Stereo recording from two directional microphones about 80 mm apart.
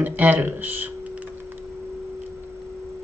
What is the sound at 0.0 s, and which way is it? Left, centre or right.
Speech, right.